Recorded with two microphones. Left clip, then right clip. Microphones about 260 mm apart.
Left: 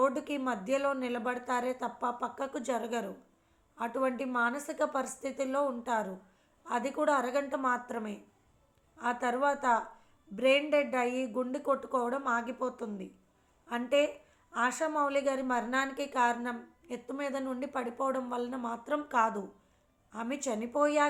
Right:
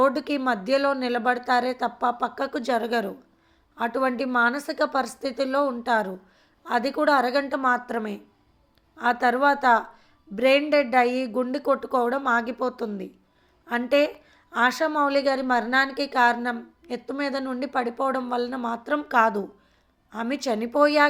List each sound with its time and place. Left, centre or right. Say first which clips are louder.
0.0 s a woman's voice: right 8 dB; right